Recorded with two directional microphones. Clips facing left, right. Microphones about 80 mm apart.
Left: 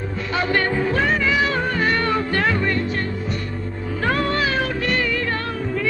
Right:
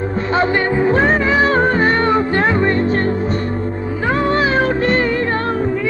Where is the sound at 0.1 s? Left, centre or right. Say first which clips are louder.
Right 5 dB; right.